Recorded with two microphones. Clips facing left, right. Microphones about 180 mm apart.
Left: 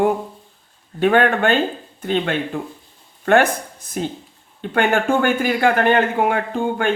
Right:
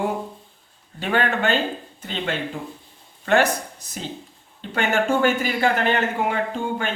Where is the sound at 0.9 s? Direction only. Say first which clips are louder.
Left 7 dB; 55° left (ahead or behind).